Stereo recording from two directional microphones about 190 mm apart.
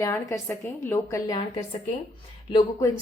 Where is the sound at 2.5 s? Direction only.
20° left (ahead or behind).